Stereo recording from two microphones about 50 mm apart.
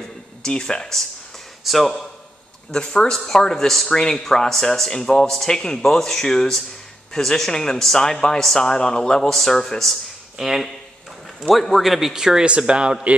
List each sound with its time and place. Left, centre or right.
0.4 s speech: centre
1.6 s a man's voice: centre
2.7 s speech: centre
10.3 s a man's voice: centre
12.4 s speech: right